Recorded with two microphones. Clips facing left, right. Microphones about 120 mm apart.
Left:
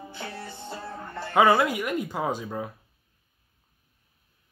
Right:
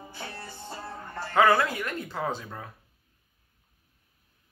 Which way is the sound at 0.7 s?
70° left (ahead or behind).